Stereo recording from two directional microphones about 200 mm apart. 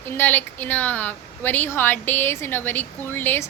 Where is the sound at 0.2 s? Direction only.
10° left (ahead or behind).